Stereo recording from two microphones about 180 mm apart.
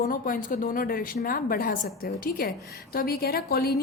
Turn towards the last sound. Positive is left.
turn(degrees=60)  # may be behind; listen again after turning